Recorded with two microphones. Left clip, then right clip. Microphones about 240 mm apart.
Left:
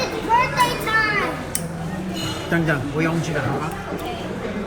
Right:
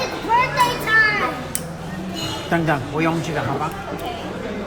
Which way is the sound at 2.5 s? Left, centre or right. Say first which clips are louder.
Right 2 dB; right.